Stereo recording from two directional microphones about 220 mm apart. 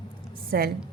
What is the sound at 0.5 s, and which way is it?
Speech, 45° right (ahead or behind).